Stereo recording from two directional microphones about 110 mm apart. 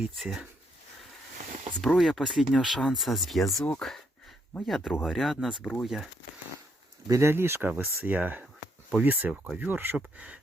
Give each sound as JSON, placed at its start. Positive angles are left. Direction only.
{"t": 0.0, "sound": "speech", "side_deg": -5}
{"t": 2.0, "sound": "speech", "side_deg": 0}
{"t": 3.7, "sound": "a sound", "side_deg": 5}
{"t": 4.6, "sound": "speech", "side_deg": 0}
{"t": 7.1, "sound": "speech", "side_deg": -25}